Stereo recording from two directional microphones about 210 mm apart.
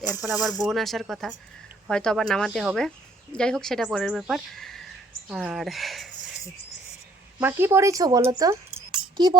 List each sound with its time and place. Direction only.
0.3 s speech: 5° right (ahead or behind)
7.3 s speech: 10° right (ahead or behind)
9.1 s a sound: 20° right (ahead or behind)